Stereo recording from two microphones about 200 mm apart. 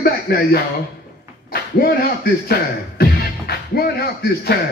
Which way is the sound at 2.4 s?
50° left (ahead or behind).